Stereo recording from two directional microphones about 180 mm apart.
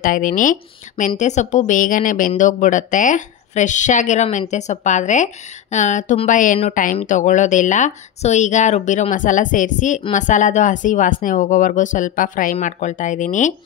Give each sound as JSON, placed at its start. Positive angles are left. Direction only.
{"t": 0.0, "sound": "speech", "side_deg": 50}